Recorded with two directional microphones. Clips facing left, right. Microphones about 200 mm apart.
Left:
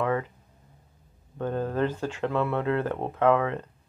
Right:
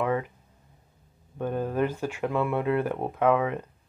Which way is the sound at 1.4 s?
15° right (ahead or behind).